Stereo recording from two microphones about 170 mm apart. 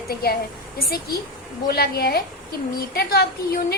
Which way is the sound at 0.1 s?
65° left (ahead or behind).